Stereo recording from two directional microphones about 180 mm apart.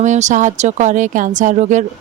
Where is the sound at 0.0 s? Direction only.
40° right (ahead or behind).